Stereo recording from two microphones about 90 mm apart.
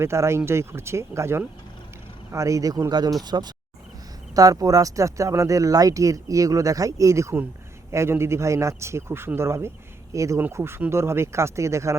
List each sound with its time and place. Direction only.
0.0 s speech: 30° right (ahead or behind)
3.2 s speech: 50° right (ahead or behind); by 11.9 s 35° right (ahead or behind)